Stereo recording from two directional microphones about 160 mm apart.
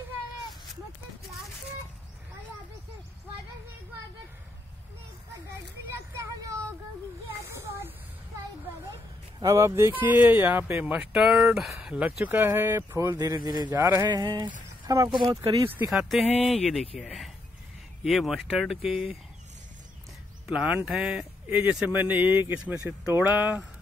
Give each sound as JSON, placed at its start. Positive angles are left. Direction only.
{"t": 7.2, "sound": "a sound", "side_deg": -15}
{"t": 9.4, "sound": "speech", "side_deg": -20}
{"t": 15.9, "sound": "speech", "side_deg": 0}
{"t": 20.4, "sound": "speech", "side_deg": -5}